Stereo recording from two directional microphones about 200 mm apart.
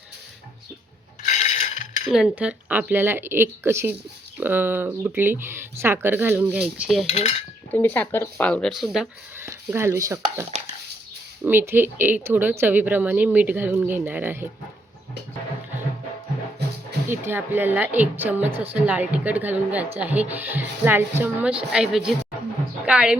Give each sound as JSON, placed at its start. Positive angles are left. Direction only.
{"t": 1.2, "sound": "mechanisms", "side_deg": 35}
{"t": 2.1, "sound": "speech", "side_deg": -5}
{"t": 7.1, "sound": "cutlery", "side_deg": 30}
{"t": 7.7, "sound": "speech", "side_deg": 10}
{"t": 9.4, "sound": "speech", "side_deg": -10}
{"t": 11.4, "sound": "speech", "side_deg": -10}
{"t": 17.1, "sound": "speech", "side_deg": -10}